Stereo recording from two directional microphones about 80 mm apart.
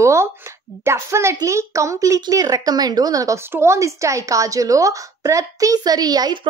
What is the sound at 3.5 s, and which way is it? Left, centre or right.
A woman's voice, right.